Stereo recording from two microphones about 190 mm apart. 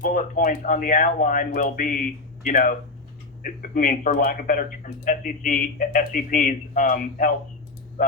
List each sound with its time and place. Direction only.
0.0 s speech: 45° left (ahead or behind)